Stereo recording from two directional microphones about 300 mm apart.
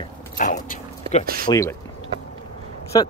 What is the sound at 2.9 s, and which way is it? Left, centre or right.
Speech, centre.